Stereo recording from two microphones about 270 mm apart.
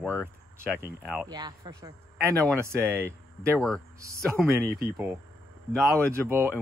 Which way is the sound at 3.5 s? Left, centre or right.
Centre.